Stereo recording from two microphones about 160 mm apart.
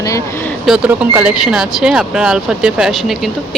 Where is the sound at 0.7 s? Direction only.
5° right (ahead or behind).